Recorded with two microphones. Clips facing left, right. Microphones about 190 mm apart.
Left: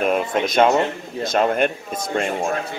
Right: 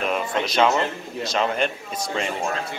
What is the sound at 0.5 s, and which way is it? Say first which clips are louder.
Speech: left 4 dB; 50° left (ahead or behind).